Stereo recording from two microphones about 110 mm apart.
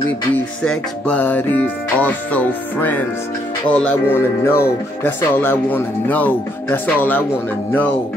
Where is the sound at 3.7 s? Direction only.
20° left (ahead or behind).